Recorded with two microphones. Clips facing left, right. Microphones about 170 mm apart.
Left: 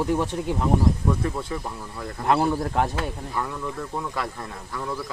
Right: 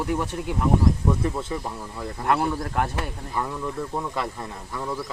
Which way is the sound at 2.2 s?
5° left (ahead or behind).